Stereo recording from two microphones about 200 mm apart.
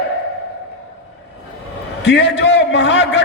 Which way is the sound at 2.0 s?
60° left (ahead or behind).